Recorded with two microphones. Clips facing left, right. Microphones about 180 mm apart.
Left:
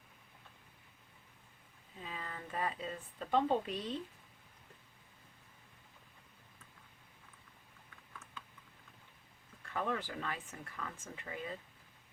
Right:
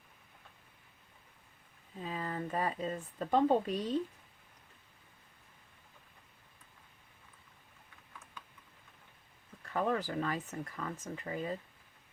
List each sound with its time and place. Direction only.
2.0 s speech: 40° right (ahead or behind)
9.6 s speech: 35° right (ahead or behind)